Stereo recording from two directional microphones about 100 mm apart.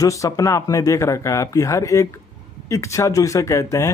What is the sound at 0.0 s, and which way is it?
Speech, 35° left (ahead or behind).